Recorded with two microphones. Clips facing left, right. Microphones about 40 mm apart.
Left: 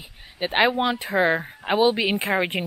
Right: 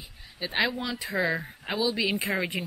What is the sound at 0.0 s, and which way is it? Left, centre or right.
Speech, left.